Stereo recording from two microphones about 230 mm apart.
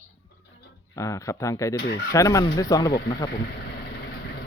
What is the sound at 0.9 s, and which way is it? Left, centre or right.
Speech, centre.